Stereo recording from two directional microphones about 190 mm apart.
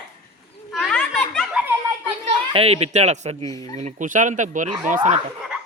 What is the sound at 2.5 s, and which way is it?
Speech, 30° right (ahead or behind).